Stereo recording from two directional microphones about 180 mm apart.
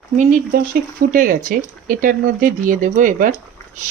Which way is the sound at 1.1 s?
50° right (ahead or behind).